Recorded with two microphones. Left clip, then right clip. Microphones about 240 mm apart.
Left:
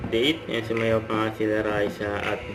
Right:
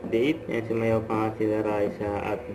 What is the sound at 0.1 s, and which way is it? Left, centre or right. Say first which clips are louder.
Speech: left 2 dB; centre.